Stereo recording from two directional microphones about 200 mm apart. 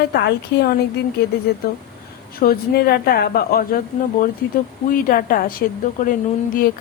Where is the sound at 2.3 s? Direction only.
50° left (ahead or behind).